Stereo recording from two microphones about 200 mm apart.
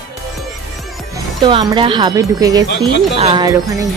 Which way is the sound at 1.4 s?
25° right (ahead or behind).